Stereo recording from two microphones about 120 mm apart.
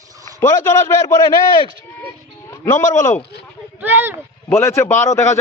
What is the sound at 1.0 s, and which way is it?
Speech, 35° left (ahead or behind).